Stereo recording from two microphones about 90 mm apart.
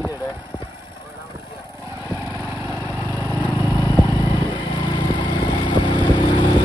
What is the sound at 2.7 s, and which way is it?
Lawn mower, 35° right (ahead or behind).